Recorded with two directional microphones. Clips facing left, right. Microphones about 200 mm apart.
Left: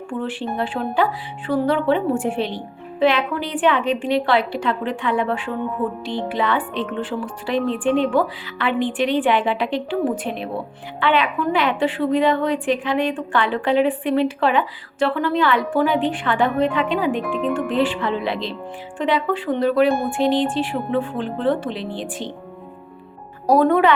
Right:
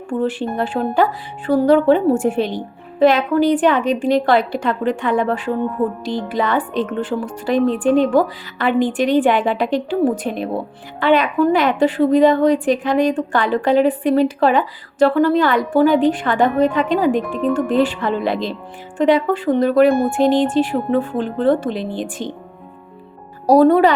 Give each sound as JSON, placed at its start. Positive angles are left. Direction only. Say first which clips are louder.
{"t": 0.1, "sound": "a woman's voice", "louder": "right 6 dB", "side_deg": -40}
{"t": 23.5, "sound": "a woman's voice", "louder": "right 4 dB", "side_deg": -35}